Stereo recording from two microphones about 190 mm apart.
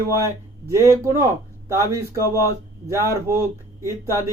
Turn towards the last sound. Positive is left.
turn(degrees=-15)  # may be behind; listen again after turning